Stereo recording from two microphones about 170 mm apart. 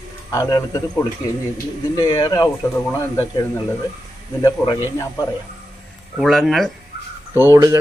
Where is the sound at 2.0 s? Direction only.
20° left (ahead or behind).